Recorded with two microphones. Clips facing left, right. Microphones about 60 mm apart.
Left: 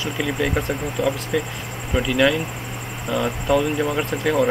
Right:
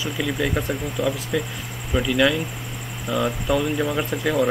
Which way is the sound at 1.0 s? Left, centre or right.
Left.